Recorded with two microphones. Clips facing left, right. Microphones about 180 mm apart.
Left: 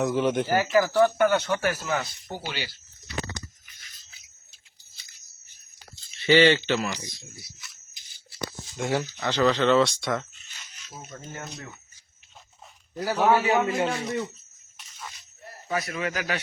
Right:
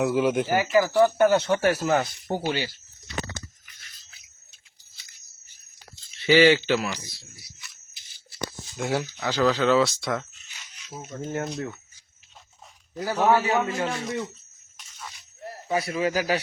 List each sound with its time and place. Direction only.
0.0 s speech: 5° right (ahead or behind)
1.2 s speech: 30° right (ahead or behind)
6.2 s speech: 10° right (ahead or behind)
8.7 s speech: 5° right (ahead or behind)
11.3 s speech: 55° right (ahead or behind)
12.9 s a man's voice: 5° left (ahead or behind)
13.8 s speech: centre (ahead or behind)
14.8 s a sound: 5° left (ahead or behind)
15.7 s speech: 30° right (ahead or behind)